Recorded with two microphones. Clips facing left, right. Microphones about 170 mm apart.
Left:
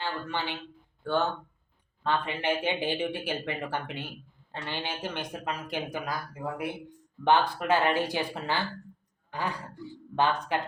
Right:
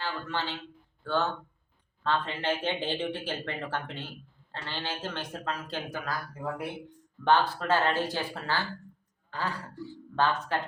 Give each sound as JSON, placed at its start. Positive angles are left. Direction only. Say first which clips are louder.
{"t": 0.0, "sound": "a man's voice", "louder": "left 1 dB", "side_deg": 15}
{"t": 7.3, "sound": "speech", "louder": "left 1 dB", "side_deg": 15}